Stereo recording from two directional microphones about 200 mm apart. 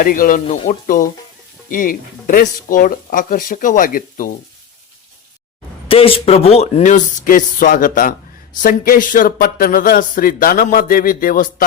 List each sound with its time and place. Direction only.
0.0 s speech: 45° left (ahead or behind)
0.4 s speech: 35° left (ahead or behind)
5.9 s speech: 30° left (ahead or behind); by 11.6 s 45° left (ahead or behind)